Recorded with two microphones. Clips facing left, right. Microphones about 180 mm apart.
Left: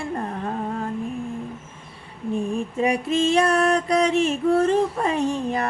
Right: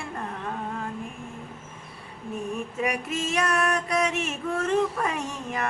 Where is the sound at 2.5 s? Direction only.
30° left (ahead or behind).